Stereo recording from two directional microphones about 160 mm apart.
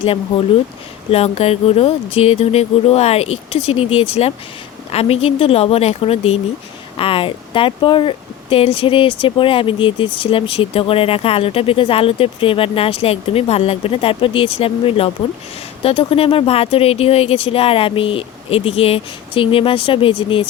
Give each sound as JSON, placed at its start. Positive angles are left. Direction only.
{"t": 0.0, "sound": "speech", "side_deg": 35}